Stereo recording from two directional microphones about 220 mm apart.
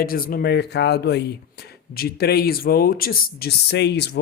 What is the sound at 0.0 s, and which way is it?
Speech, 40° left (ahead or behind).